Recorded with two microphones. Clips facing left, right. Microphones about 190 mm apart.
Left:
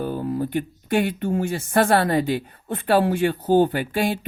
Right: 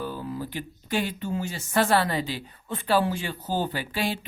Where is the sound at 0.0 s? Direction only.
55° left (ahead or behind).